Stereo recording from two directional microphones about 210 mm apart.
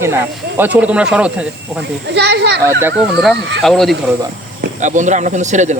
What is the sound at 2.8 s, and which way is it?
Speech, centre (ahead or behind).